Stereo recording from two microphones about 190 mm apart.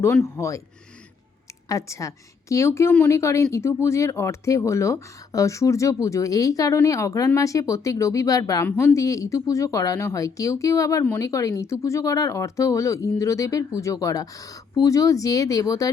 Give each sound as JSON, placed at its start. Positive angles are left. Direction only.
{"t": 0.0, "sound": "a woman's voice", "side_deg": 10}
{"t": 1.6, "sound": "a woman's voice", "side_deg": 15}